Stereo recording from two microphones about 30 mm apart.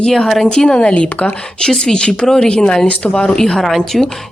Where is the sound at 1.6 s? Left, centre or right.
Left.